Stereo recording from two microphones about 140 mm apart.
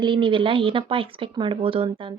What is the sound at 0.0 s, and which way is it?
Speech, 35° right (ahead or behind).